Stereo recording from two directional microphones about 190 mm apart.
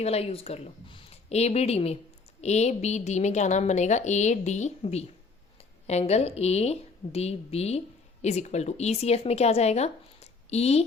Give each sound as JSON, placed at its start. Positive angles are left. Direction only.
{"t": 0.0, "sound": "a woman's voice", "side_deg": 35}